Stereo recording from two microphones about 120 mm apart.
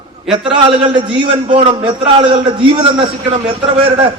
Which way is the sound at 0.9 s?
45° right (ahead or behind).